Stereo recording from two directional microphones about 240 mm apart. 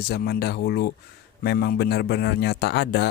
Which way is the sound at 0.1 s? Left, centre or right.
Left.